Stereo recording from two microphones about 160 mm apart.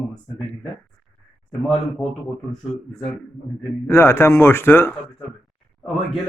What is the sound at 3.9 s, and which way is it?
Speech, 15° left (ahead or behind).